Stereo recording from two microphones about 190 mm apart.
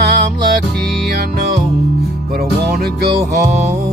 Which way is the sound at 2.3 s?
55° right (ahead or behind).